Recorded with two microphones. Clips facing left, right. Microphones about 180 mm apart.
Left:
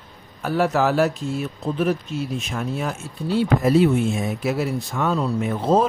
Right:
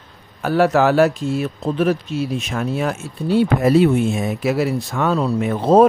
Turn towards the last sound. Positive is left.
turn(degrees=-65)  # may be behind; listen again after turning